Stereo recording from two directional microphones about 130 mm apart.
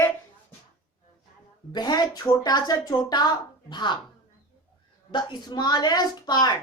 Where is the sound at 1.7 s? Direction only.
35° left (ahead or behind).